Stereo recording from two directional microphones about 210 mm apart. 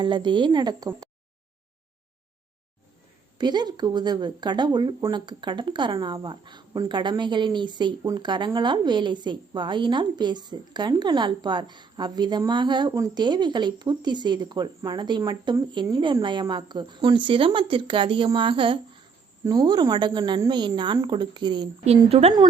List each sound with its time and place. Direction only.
0.0 s speech: 20° right (ahead or behind)
3.3 s speech: 20° right (ahead or behind)